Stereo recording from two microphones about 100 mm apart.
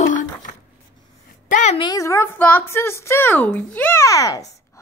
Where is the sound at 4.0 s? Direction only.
35° left (ahead or behind).